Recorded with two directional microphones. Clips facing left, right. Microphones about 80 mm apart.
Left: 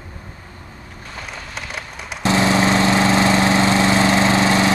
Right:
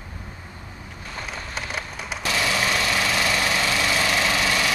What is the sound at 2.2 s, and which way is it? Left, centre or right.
Lawn mower, left.